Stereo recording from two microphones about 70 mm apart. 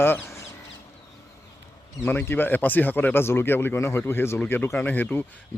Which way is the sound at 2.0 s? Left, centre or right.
Left.